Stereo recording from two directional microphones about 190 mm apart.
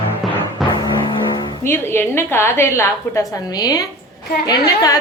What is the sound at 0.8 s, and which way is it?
A woman's voice, 20° left (ahead or behind).